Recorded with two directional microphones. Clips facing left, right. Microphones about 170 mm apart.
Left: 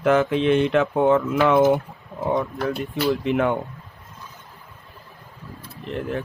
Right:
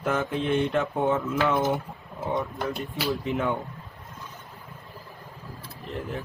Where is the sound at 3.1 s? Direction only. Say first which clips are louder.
Left 6 dB; 65° left (ahead or behind).